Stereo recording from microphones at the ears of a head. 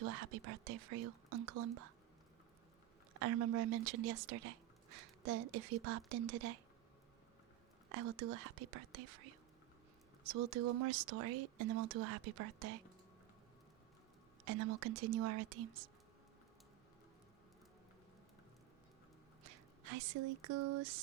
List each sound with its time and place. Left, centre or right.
0.0 s speech: right
3.1 s speech: right
7.9 s speech: right
14.4 s speech: right
19.4 s speech: right